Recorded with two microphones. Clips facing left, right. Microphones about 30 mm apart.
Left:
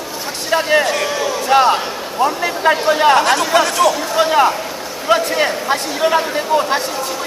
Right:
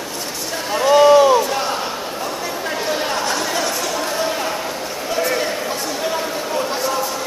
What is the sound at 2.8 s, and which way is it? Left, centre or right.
Chatter, left.